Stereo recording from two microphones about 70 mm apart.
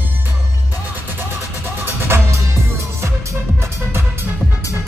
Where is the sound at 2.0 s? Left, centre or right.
Right.